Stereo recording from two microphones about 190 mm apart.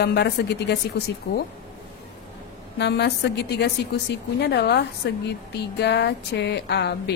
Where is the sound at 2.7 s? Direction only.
60° left (ahead or behind).